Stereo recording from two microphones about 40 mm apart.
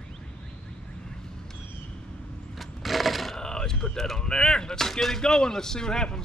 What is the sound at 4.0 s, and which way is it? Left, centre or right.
Speech, centre.